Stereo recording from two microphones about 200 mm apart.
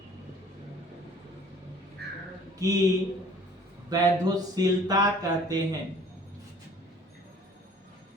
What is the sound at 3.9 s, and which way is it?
Speech, 20° right (ahead or behind).